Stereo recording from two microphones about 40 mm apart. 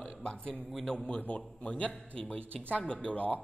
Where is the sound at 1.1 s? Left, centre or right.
Left.